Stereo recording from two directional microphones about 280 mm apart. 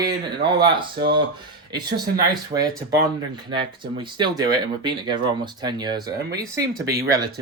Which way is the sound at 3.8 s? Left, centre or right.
Centre.